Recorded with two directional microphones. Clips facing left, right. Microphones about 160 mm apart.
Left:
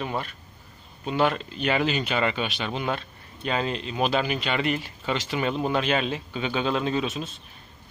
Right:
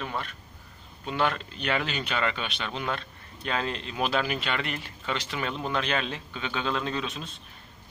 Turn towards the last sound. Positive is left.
turn(degrees=5)  # may be behind; listen again after turning